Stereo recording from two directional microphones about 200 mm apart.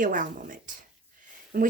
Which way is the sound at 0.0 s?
40° right (ahead or behind).